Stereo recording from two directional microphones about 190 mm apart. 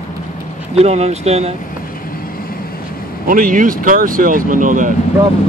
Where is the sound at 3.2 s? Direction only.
45° right (ahead or behind).